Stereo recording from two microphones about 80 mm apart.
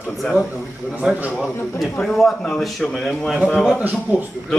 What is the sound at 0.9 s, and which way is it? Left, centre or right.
Speech, centre.